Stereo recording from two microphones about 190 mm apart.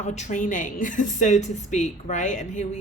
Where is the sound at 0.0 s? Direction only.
40° left (ahead or behind).